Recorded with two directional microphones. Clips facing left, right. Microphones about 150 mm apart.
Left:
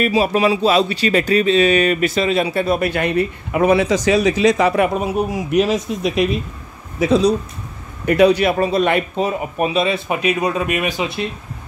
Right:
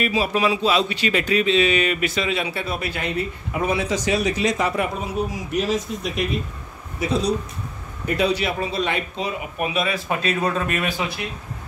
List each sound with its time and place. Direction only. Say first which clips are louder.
0.0 s speech: left 5 dB; 40° left (ahead or behind); by 7.2 s 90° left
8.0 s a man's voice: left 9 dB; 70° left (ahead or behind)
9.6 s speech: left 6 dB; 30° left (ahead or behind)